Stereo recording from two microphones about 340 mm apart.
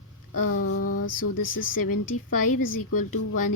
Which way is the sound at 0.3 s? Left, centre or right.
Left.